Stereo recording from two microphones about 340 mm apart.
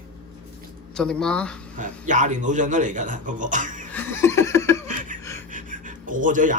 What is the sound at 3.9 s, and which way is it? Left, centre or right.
Laughter, centre.